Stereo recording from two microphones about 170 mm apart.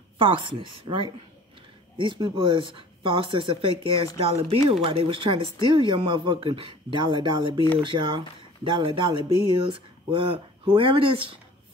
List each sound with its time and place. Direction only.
0.2 s speech: 30° right (ahead or behind)